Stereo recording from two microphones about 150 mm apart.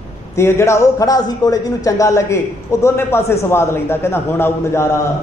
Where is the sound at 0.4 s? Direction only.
20° left (ahead or behind).